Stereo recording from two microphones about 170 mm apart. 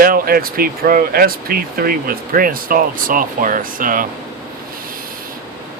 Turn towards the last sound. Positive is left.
turn(degrees=-55)  # may be behind; listen again after turning